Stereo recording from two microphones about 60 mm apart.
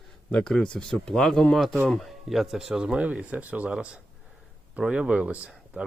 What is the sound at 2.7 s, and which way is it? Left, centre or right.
Speech, centre.